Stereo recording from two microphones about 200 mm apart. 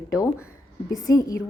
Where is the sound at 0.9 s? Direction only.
20° left (ahead or behind).